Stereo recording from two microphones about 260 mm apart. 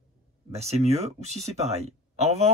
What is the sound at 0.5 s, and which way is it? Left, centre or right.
Speech, right.